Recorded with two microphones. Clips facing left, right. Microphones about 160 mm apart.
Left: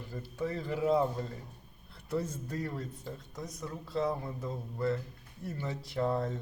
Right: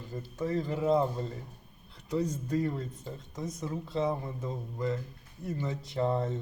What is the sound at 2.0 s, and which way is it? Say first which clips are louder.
Speech: right 4 dB; 15° right (ahead or behind).